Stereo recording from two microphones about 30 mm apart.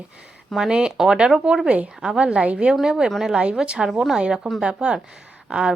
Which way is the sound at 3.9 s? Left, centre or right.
Centre.